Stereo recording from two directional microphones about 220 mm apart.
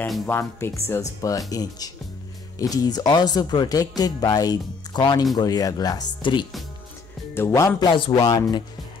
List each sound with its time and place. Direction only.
0.0 s speech: 10° left (ahead or behind)